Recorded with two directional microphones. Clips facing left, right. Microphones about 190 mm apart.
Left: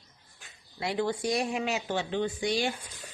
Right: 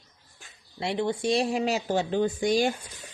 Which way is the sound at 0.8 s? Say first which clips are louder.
Right 2 dB; 25° right (ahead or behind).